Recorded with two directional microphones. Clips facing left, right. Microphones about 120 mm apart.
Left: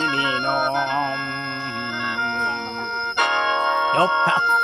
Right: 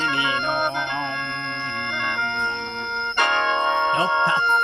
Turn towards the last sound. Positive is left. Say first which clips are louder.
# left 1 dB
turn(degrees=5)  # may be behind; listen again after turning